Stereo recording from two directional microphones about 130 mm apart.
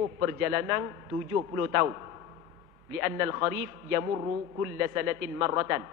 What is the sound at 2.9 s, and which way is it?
A man's voice, 20° right (ahead or behind).